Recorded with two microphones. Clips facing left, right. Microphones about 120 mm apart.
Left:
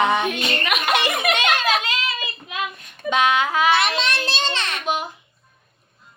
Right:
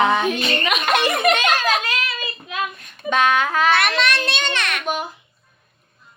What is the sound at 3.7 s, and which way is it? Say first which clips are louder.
Speech: right 1 dB; 55° right (ahead or behind).